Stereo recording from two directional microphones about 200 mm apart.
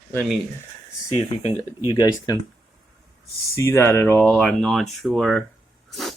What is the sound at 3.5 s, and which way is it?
Speech, 15° left (ahead or behind).